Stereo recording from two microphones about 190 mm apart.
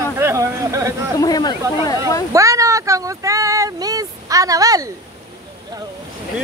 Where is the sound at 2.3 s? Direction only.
15° right (ahead or behind).